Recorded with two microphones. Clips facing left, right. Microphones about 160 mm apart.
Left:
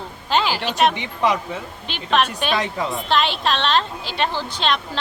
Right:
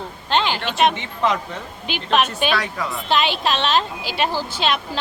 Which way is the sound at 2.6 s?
25° left (ahead or behind).